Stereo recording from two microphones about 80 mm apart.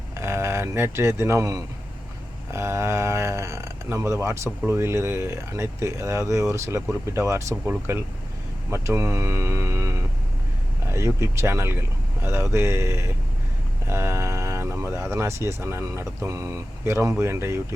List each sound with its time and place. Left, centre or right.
0.2 s speech: right